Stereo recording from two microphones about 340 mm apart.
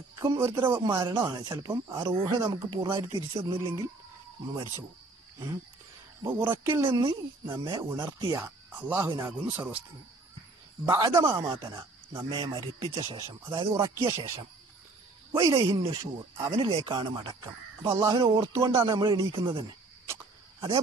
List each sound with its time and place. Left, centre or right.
0.2 s speech: centre
6.2 s speech: centre
10.9 s speech: centre